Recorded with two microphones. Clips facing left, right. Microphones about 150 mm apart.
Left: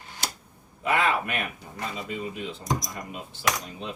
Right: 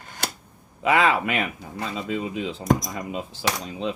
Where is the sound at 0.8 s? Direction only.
90° right.